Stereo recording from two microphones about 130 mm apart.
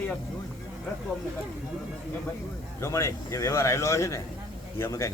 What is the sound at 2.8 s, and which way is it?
A man's voice, 20° left (ahead or behind).